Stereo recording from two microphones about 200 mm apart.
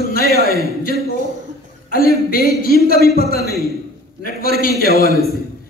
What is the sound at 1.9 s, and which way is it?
A man's voice, 45° left (ahead or behind).